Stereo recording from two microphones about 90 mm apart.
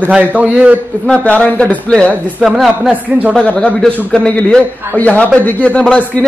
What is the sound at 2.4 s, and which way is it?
Speech, 5° right (ahead or behind).